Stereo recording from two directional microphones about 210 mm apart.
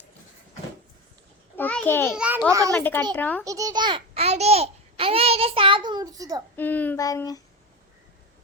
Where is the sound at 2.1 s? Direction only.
5° right (ahead or behind).